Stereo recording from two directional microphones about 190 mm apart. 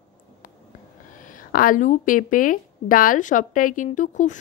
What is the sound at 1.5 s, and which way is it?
Speech, 45° left (ahead or behind).